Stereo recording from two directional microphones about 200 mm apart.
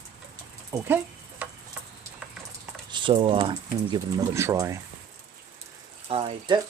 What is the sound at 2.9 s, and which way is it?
Speech, 25° right (ahead or behind).